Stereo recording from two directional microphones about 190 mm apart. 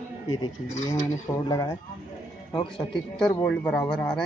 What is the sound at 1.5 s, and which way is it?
Speech, 20° left (ahead or behind).